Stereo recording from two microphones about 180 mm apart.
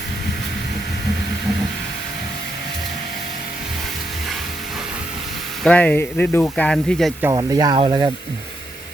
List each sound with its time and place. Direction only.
5.6 s speech: 10° left (ahead or behind)
7.2 s speech: 20° right (ahead or behind)